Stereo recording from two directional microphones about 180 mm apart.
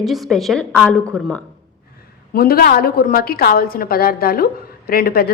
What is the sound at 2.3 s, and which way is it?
A woman's voice, 55° left (ahead or behind).